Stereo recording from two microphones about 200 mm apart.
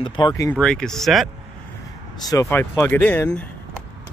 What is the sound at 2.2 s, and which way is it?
Speech, 15° left (ahead or behind).